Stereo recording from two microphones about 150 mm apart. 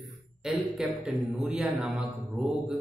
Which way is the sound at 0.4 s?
Centre (ahead or behind).